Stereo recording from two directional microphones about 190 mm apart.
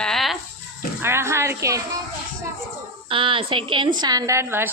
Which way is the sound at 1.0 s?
15° right (ahead or behind).